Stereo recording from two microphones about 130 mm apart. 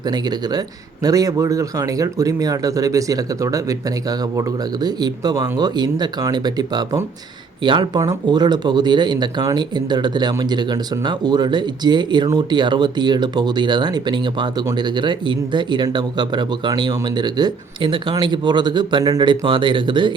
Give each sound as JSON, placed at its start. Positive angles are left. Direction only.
{"t": 0.1, "sound": "speech", "side_deg": -30}